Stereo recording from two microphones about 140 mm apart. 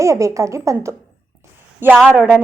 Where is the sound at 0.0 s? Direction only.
20° right (ahead or behind).